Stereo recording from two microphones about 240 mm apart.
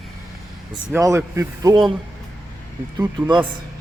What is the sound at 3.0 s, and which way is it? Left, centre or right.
Speech, centre.